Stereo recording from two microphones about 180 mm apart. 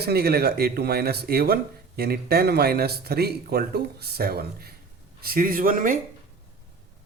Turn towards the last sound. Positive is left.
turn(degrees=-50)  # may be behind; listen again after turning